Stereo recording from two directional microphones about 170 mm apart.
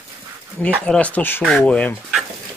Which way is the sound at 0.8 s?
5° left (ahead or behind).